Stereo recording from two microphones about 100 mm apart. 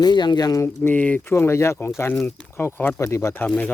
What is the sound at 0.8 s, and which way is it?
Speech, 15° left (ahead or behind).